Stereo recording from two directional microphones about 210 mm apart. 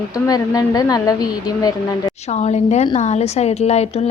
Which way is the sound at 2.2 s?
30° left (ahead or behind).